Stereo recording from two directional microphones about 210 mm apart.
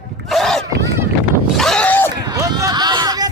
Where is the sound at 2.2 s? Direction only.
20° right (ahead or behind).